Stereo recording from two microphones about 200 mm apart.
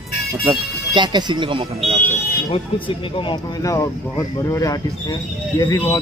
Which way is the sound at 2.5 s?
25° left (ahead or behind).